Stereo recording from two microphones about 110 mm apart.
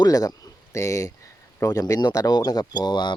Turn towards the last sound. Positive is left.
turn(degrees=40)  # may be behind; listen again after turning